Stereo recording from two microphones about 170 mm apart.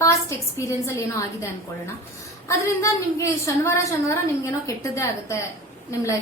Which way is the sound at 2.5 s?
20° left (ahead or behind).